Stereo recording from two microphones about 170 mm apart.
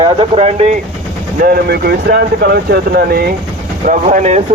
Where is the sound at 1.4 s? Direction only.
65° right (ahead or behind).